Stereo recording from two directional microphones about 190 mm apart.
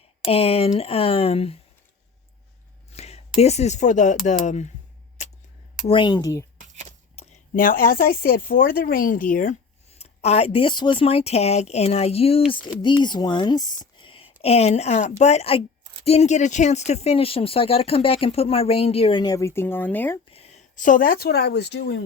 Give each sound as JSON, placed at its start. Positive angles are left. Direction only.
{"t": 0.3, "sound": "speech", "side_deg": 30}
{"t": 2.9, "sound": "speech", "side_deg": 35}
{"t": 5.2, "sound": "a sound", "side_deg": 40}
{"t": 5.9, "sound": "speech", "side_deg": 25}
{"t": 7.2, "sound": "a sound", "side_deg": 30}
{"t": 7.5, "sound": "speech", "side_deg": 45}
{"t": 20.3, "sound": "speech", "side_deg": 35}